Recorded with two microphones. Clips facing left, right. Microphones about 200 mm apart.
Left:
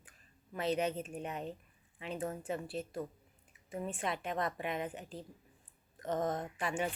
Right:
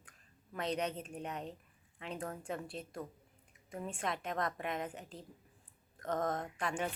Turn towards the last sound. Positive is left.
turn(degrees=5)  # may be behind; listen again after turning